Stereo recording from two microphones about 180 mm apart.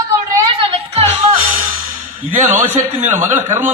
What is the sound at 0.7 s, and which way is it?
Music, 30° right (ahead or behind).